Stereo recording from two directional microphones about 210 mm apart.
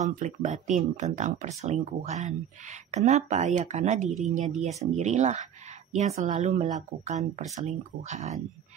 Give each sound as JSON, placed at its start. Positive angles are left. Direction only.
{"t": 0.1, "sound": "speech", "side_deg": -35}